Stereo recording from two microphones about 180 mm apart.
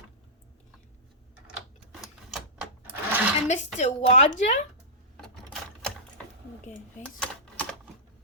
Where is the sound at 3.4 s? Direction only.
40° left (ahead or behind).